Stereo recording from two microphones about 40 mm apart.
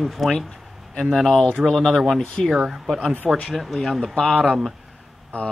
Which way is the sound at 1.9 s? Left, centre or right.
Centre.